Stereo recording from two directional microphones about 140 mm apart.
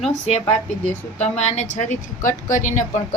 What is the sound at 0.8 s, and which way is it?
Speech, 55° left (ahead or behind).